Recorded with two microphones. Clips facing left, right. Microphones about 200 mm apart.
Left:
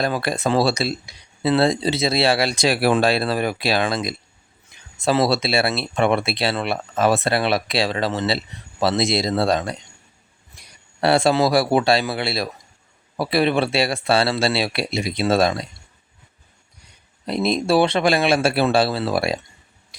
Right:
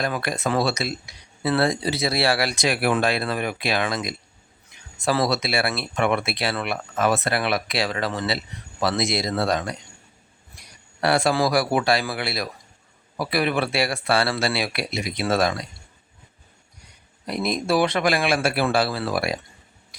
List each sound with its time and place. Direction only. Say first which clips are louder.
0.0 s speech: left 4 dB; 30° left (ahead or behind)
11.0 s speech: left 4 dB; 25° left (ahead or behind)
17.2 s speech: left 4 dB; 25° left (ahead or behind)